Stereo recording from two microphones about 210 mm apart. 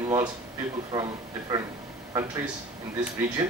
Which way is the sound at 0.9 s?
20° right (ahead or behind).